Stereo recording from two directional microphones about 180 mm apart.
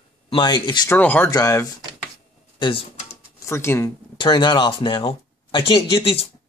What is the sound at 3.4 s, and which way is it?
Speech, 15° left (ahead or behind).